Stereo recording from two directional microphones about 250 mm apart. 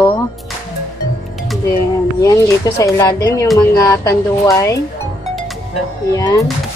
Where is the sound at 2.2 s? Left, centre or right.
Centre.